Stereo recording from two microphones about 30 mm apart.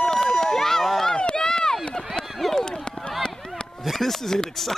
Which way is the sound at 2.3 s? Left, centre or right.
Centre.